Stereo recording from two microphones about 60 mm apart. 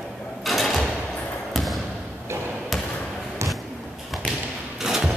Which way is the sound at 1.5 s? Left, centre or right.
Centre.